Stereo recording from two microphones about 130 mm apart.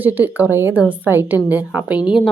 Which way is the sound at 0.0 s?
15° right (ahead or behind).